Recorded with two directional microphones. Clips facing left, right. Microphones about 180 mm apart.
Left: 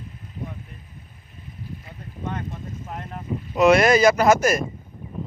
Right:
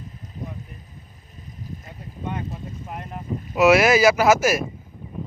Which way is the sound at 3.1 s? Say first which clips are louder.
Left 1 dB; 5° right (ahead or behind).